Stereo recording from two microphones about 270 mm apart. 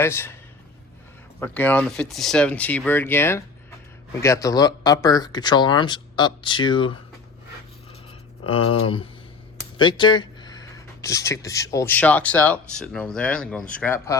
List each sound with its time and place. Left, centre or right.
0.0 s speech: centre
1.4 s speech: centre
8.4 s speech: left